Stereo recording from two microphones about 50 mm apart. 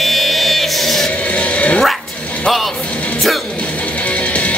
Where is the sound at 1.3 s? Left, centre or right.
Left.